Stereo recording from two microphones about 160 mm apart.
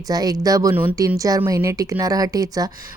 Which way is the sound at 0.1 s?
25° right (ahead or behind).